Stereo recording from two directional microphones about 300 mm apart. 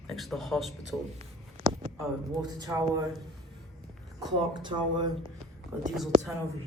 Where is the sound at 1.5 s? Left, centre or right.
Centre.